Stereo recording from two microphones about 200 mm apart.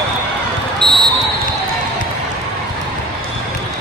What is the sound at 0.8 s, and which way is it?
Basketball bounce, 25° right (ahead or behind).